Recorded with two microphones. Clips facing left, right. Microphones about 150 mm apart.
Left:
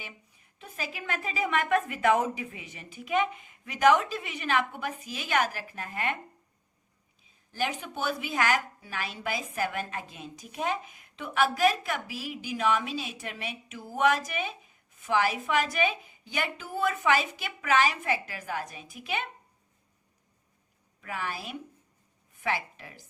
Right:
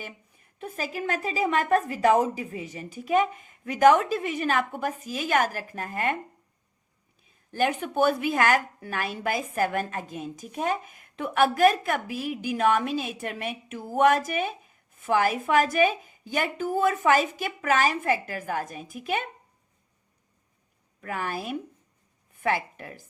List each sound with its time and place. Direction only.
0.0 s a woman's voice: 45° right (ahead or behind)
7.2 s a woman's voice: 55° right (ahead or behind)
21.0 s a woman's voice: 50° right (ahead or behind)